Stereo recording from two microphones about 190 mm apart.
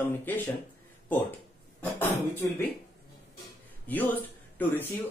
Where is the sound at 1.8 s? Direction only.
10° left (ahead or behind).